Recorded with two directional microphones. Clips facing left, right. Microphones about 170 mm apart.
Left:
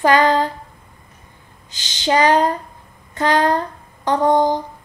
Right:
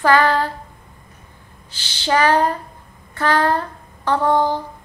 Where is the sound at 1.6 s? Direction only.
15° left (ahead or behind).